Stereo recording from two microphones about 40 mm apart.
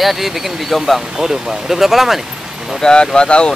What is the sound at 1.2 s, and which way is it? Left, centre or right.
Speech, centre.